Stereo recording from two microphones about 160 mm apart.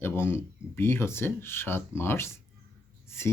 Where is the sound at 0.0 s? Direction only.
15° left (ahead or behind).